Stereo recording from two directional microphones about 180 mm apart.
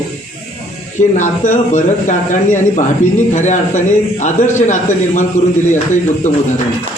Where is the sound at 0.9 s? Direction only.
45° left (ahead or behind).